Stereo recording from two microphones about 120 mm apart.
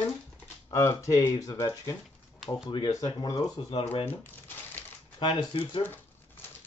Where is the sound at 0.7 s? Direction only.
25° left (ahead or behind).